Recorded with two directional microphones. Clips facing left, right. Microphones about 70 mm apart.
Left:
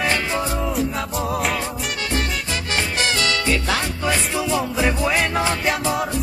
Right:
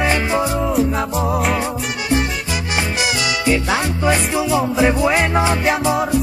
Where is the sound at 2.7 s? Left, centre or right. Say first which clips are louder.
Right 1 dB; centre.